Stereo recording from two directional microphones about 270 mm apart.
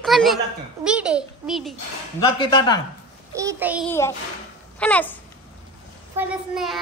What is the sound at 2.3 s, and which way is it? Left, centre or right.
Speech, centre.